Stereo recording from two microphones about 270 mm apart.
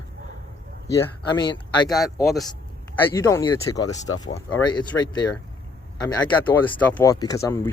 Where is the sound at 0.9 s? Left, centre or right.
Centre.